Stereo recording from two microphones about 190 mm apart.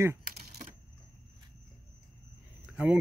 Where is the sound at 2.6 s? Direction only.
5° right (ahead or behind).